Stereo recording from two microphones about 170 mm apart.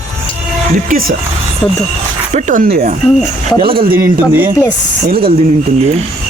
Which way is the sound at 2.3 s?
50° right (ahead or behind).